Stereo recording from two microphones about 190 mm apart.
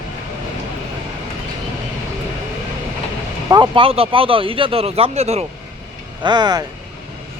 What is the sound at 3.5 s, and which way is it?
Speech, 25° right (ahead or behind).